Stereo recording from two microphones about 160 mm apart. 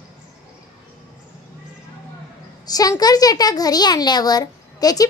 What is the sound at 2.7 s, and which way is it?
A child's voice, 25° left (ahead or behind).